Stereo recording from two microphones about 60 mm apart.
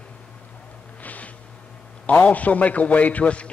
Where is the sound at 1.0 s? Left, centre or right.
Left.